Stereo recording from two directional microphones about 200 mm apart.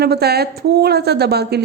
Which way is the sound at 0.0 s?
55° right (ahead or behind).